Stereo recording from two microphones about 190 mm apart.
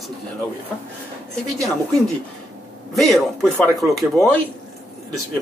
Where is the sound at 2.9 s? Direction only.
Centre (ahead or behind).